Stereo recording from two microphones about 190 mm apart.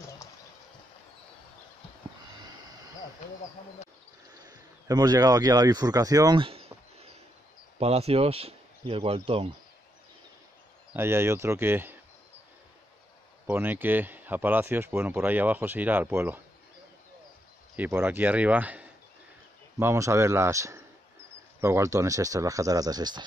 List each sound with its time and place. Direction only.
4.5 s speech: 20° right (ahead or behind)
10.9 s speech: 15° right (ahead or behind)
13.5 s speech: 10° right (ahead or behind)
17.7 s speech: 10° right (ahead or behind)